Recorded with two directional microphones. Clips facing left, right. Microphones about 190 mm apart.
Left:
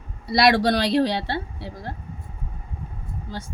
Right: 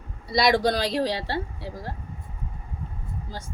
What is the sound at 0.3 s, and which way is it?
Speech, 70° left (ahead or behind).